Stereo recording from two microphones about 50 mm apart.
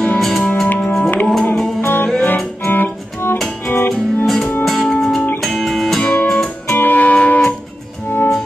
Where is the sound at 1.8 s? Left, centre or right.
Left.